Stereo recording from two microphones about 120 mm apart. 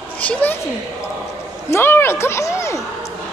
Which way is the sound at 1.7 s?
20° left (ahead or behind).